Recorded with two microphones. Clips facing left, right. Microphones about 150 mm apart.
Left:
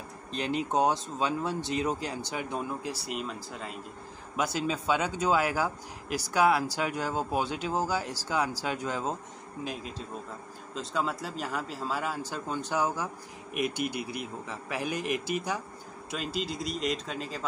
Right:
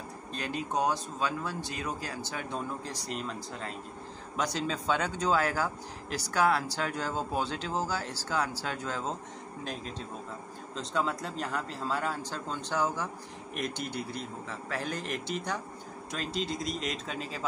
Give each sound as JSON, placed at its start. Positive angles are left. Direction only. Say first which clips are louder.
{"t": 0.3, "sound": "speech", "louder": "left 4 dB", "side_deg": 20}